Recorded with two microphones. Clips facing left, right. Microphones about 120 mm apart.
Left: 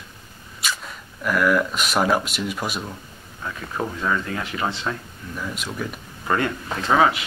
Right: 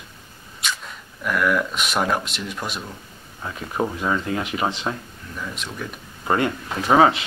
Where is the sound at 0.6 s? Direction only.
Centre (ahead or behind).